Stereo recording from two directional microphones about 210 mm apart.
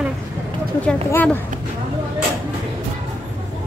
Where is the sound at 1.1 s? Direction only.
10° left (ahead or behind).